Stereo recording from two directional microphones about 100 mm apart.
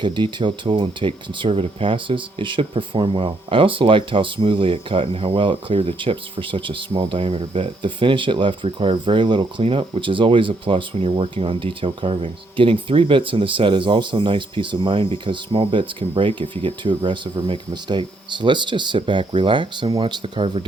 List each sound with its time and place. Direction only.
0.0 s speech: 50° right (ahead or behind)